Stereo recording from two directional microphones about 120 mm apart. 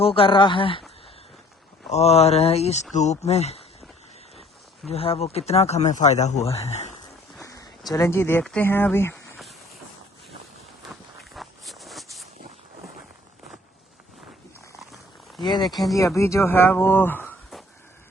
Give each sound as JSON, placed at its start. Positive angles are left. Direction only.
{"t": 0.0, "sound": "speech", "side_deg": 50}
{"t": 1.9, "sound": "speech", "side_deg": 60}
{"t": 2.9, "sound": "speech", "side_deg": 70}
{"t": 4.9, "sound": "speech", "side_deg": 55}
{"t": 7.3, "sound": "a sound", "side_deg": 30}
{"t": 8.6, "sound": "speech", "side_deg": 20}
{"t": 11.3, "sound": "a sound", "side_deg": 0}
{"t": 15.4, "sound": "speech", "side_deg": 40}
{"t": 16.0, "sound": "speech", "side_deg": 25}